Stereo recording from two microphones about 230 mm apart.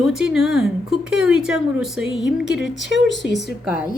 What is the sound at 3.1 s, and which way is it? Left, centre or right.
Speech, centre.